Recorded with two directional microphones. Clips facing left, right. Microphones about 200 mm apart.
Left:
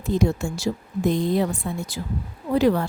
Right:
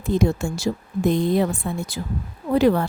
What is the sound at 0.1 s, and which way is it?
A woman's voice, 60° right (ahead or behind).